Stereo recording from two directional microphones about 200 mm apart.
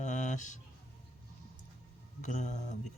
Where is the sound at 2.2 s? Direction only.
35° left (ahead or behind).